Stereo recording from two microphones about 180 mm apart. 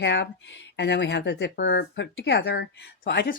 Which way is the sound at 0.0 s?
80° left.